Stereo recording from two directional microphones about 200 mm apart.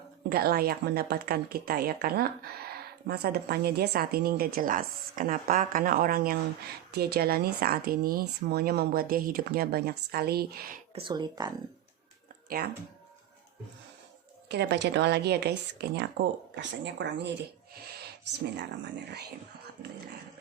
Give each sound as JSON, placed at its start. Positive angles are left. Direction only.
{"t": 0.3, "sound": "speech", "side_deg": -50}
{"t": 10.9, "sound": "speech", "side_deg": -25}
{"t": 12.5, "sound": "speech", "side_deg": -50}
{"t": 14.5, "sound": "speech", "side_deg": -55}
{"t": 17.8, "sound": "a sound", "side_deg": -50}